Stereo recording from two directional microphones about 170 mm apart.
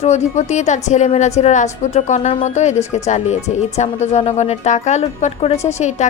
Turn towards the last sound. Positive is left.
turn(degrees=45)  # may be behind; listen again after turning